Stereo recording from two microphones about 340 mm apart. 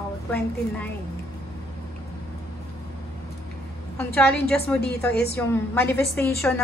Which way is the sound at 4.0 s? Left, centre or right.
Centre.